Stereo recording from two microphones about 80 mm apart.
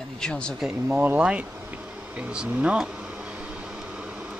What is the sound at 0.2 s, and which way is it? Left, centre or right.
Speech, centre.